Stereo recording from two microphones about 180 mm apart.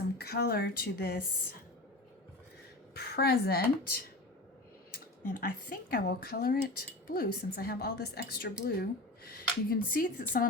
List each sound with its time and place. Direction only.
0.2 s a woman's voice: 60° left (ahead or behind)
2.9 s a woman's voice: 60° left (ahead or behind)